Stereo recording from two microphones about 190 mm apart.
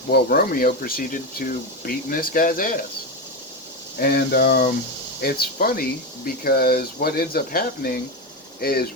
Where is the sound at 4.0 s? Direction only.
55° left (ahead or behind).